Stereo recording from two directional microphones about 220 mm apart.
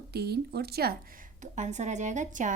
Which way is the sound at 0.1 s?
45° right (ahead or behind).